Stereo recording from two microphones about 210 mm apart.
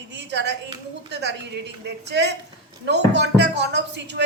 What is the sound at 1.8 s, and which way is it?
A woman's voice, 55° right (ahead or behind).